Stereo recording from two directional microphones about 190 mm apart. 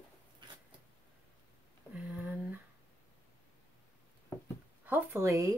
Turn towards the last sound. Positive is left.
turn(degrees=-15)  # may be behind; listen again after turning